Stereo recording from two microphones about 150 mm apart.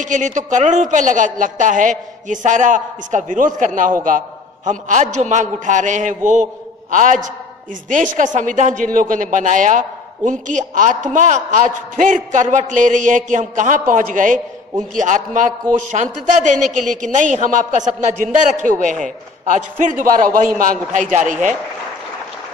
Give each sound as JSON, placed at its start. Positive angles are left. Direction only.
{"t": 0.0, "sound": "a woman's voice", "side_deg": -55}
{"t": 20.9, "sound": "a woman's voice", "side_deg": -55}